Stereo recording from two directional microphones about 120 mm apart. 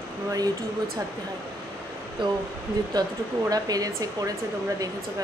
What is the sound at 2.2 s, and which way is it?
Speech, 40° right (ahead or behind).